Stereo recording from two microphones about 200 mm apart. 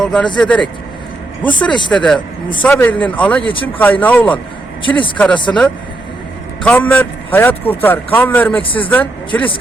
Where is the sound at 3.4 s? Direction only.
25° left (ahead or behind).